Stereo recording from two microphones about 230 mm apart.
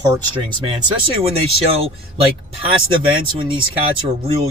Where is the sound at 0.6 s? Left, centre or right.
Right.